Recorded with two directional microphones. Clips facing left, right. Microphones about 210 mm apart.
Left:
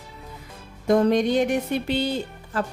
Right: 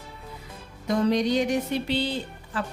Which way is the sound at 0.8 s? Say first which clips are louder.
Left 4 dB; 55° left (ahead or behind).